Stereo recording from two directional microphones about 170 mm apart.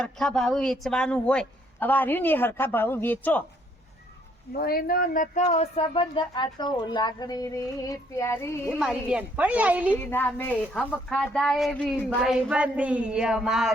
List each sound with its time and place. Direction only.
0.0 s a woman's voice: centre (ahead or behind)
4.5 s speech: 60° left (ahead or behind)
5.5 s a woman's voice: 35° left (ahead or behind); by 8.7 s 15° left (ahead or behind)
8.7 s a woman's voice: 5° right (ahead or behind)
10.1 s speech: 10° left (ahead or behind)